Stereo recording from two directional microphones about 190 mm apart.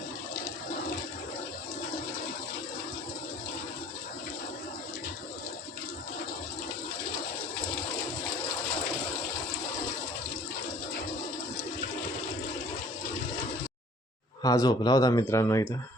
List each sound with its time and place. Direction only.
14.4 s speech: 20° left (ahead or behind)